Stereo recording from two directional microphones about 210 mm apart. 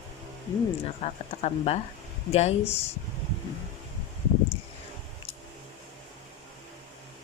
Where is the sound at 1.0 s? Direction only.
30° left (ahead or behind).